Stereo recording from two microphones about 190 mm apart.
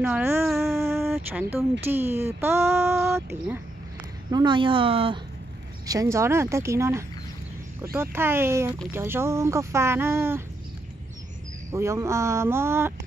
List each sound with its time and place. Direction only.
0.0 s speech: 10° right (ahead or behind)
4.3 s speech: 25° right (ahead or behind)
5.9 s speech: 15° right (ahead or behind)
11.7 s speech: 15° right (ahead or behind)